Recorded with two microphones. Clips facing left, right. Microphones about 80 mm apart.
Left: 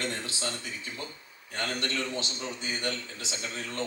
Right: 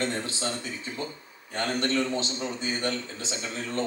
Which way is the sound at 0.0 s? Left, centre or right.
Right.